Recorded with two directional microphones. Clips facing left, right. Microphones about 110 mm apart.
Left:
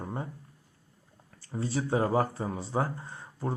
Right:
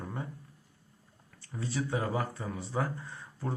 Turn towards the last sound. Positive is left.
turn(degrees=30)  # may be behind; listen again after turning